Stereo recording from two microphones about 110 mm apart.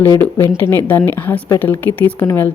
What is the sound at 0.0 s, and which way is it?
A woman's voice, 20° left (ahead or behind).